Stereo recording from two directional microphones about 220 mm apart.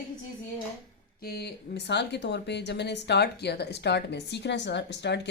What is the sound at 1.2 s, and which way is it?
A woman's voice, 45° left (ahead or behind).